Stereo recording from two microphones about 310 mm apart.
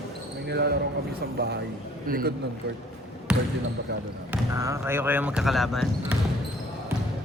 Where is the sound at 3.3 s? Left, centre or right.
Centre.